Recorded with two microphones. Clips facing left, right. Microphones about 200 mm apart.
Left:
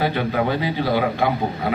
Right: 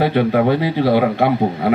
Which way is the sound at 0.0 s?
65° right (ahead or behind).